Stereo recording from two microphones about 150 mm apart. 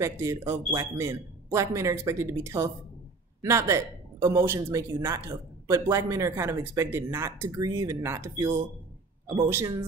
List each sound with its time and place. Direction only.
0.0 s speech: 20° right (ahead or behind)